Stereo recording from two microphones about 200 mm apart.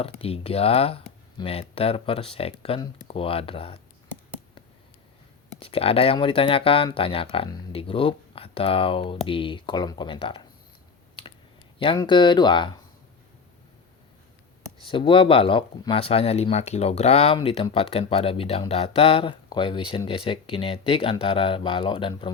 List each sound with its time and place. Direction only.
0.0 s speech: 30° left (ahead or behind)
5.5 s speech: 30° left (ahead or behind)
11.8 s speech: 25° left (ahead or behind)
14.8 s speech: 25° left (ahead or behind)